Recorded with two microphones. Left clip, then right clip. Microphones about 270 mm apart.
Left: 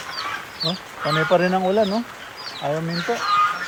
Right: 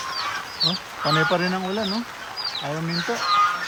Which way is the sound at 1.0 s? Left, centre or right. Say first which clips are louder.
Even; centre.